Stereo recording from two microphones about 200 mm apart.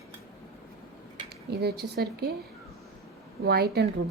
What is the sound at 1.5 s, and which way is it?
Speech, 55° right (ahead or behind).